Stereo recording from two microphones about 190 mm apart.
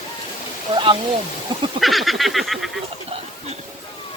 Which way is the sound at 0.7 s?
25° right (ahead or behind).